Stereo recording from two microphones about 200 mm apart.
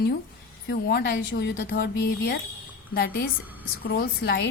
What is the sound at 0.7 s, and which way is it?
Speech, 55° left (ahead or behind).